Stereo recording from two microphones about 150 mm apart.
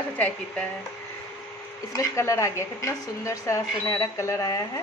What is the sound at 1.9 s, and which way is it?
A woman's voice, 20° left (ahead or behind).